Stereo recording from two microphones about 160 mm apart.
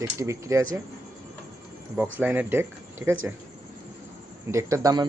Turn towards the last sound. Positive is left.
turn(degrees=-25)  # may be behind; listen again after turning